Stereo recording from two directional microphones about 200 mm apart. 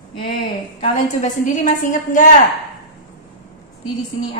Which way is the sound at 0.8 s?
40° left (ahead or behind).